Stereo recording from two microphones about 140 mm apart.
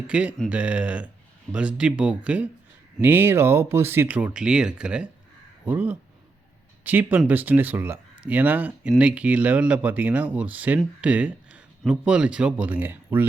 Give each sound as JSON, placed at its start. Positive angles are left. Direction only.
{"t": 0.1, "sound": "speech", "side_deg": -10}
{"t": 11.0, "sound": "a sound", "side_deg": -10}
{"t": 11.8, "sound": "speech", "side_deg": -5}